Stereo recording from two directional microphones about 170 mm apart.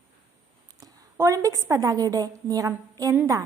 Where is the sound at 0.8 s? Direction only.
20° right (ahead or behind).